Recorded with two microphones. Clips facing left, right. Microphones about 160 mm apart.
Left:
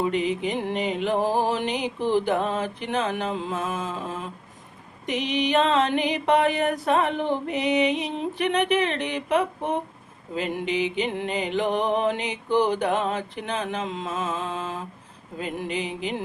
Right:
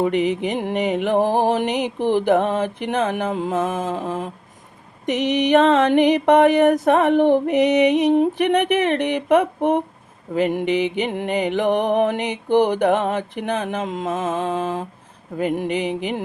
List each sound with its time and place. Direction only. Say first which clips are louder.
0.0 s mantra: right 5 dB; 65° right (ahead or behind); by 3.8 s 45° right (ahead or behind)
3.8 s mantra: right 7 dB; 60° right (ahead or behind)
14.4 s mantra: right 8 dB; 65° right (ahead or behind)